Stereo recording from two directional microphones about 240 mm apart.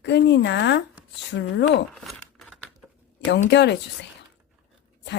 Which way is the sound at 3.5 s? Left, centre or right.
Left.